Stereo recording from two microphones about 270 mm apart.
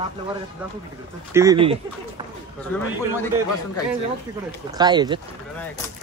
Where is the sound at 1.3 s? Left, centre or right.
Centre.